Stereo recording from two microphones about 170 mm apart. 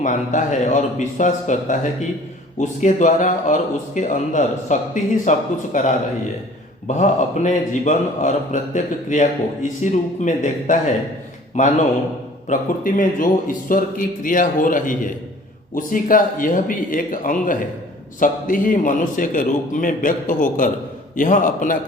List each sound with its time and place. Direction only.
0.0 s a man's voice: 45° left (ahead or behind)